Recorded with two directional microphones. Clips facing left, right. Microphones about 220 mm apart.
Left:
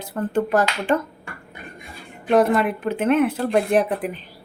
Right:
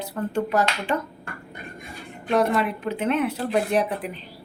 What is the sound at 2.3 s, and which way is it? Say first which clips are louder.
Speech: left 4 dB; 50° left (ahead or behind).